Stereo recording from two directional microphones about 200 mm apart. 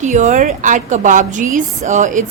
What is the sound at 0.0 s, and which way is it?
Speech, 35° right (ahead or behind).